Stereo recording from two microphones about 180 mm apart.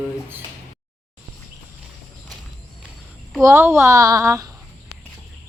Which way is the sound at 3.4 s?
15° right (ahead or behind).